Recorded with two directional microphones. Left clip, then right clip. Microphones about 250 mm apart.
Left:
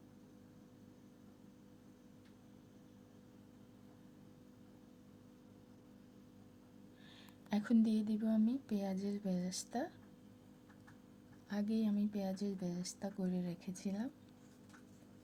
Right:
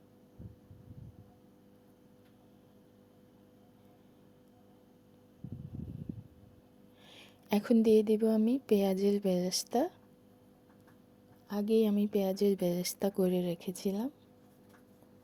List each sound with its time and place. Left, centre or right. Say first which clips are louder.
7.1 s a woman's voice: right 9 dB; right
11.4 s a woman's voice: right 11 dB; centre